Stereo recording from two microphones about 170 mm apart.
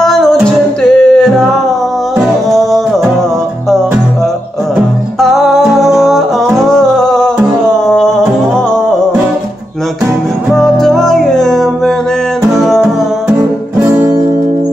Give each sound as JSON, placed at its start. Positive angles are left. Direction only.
{"t": 0.0, "sound": "music", "side_deg": 0}
{"t": 5.2, "sound": "music", "side_deg": 0}
{"t": 10.5, "sound": "music", "side_deg": 0}
{"t": 13.9, "sound": "music", "side_deg": -15}